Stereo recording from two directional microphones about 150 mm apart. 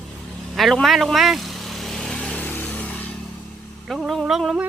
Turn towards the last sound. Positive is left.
turn(degrees=0)  # may be behind; listen again after turning